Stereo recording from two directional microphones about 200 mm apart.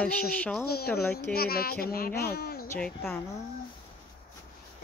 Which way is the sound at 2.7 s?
5° left (ahead or behind).